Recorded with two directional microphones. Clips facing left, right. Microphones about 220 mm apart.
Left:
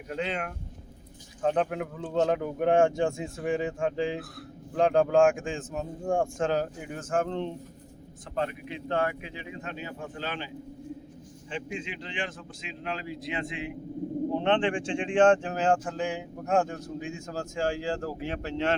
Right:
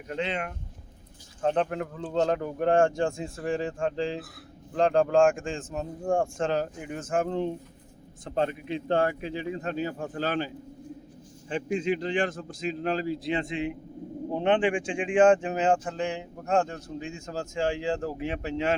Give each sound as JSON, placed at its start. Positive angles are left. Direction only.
{"t": 0.1, "sound": "speech", "side_deg": 5}
{"t": 8.4, "sound": "a man's voice", "side_deg": -30}
{"t": 14.3, "sound": "speech", "side_deg": -10}